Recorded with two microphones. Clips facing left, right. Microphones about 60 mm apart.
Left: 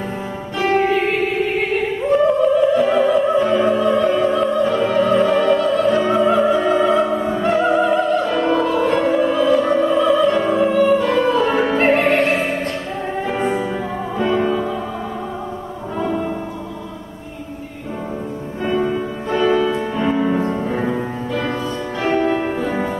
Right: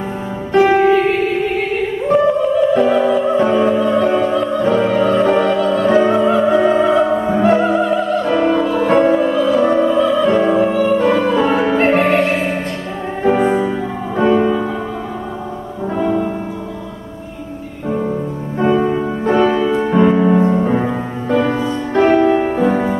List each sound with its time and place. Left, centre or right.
0.6 s music: centre
2.2 s music: centre
4.7 s opera: centre
7.1 s opera: right
7.4 s opera: centre
8.3 s music: centre
9.7 s opera: centre
10.2 s music: centre
14.2 s music: centre
16.0 s music: centre
18.6 s music: right